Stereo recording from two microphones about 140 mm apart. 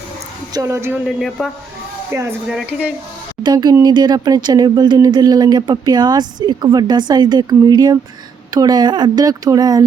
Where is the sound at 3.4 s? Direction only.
30° right (ahead or behind).